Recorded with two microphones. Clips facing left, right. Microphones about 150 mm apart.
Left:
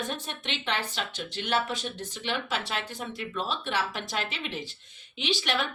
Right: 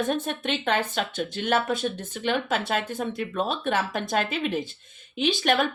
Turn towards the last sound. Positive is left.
turn(degrees=-50)  # may be behind; listen again after turning